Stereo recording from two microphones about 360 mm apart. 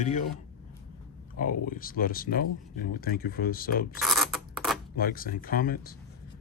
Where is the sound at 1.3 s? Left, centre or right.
Left.